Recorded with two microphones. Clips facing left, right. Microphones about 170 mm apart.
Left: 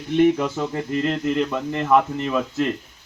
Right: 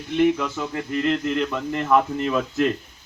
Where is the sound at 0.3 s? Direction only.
30° left (ahead or behind).